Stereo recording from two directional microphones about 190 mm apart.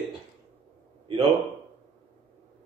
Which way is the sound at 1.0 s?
30° right (ahead or behind).